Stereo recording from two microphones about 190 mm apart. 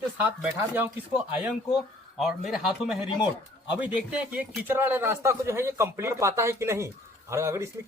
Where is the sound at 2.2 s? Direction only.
Centre (ahead or behind).